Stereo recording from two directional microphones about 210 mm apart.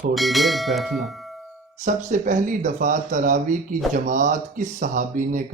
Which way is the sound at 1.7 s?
35° right (ahead or behind).